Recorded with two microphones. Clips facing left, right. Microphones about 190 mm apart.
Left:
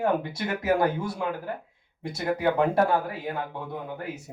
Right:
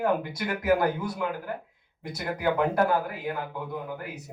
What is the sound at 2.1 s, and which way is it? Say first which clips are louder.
A man's voice: left 2 dB; 25° left (ahead or behind).